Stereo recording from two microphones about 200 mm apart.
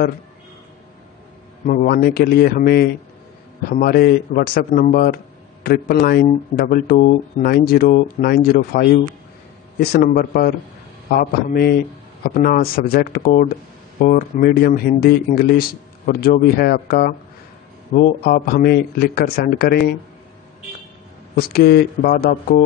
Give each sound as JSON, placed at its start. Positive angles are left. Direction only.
{"t": 1.7, "sound": "speech", "side_deg": 45}
{"t": 21.4, "sound": "speech", "side_deg": 50}